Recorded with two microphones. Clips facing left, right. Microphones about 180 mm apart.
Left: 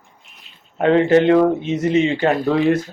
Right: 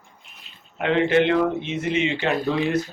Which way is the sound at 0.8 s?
40° left (ahead or behind).